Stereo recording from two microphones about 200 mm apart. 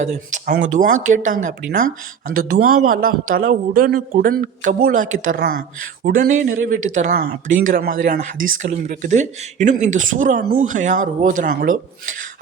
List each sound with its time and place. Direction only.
0.0 s speech: 35° right (ahead or behind)
2.5 s speech: 90° right
2.9 s speech: 45° right (ahead or behind)